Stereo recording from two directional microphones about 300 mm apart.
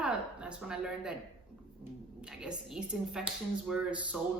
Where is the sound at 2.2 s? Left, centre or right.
Centre.